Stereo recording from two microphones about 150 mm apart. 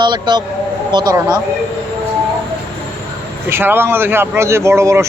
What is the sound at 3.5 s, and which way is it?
Speech, 15° right (ahead or behind).